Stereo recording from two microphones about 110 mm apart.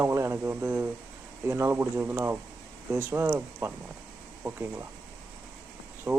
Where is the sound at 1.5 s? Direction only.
25° right (ahead or behind).